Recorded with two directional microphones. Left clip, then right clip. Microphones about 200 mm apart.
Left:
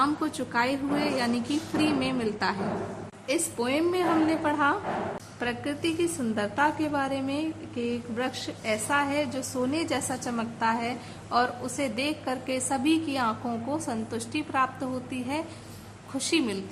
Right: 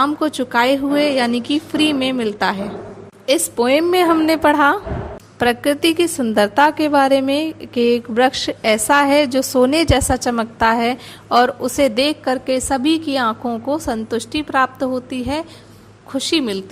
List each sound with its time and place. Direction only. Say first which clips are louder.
0.0 s a woman's voice: right 9 dB; 35° right (ahead or behind)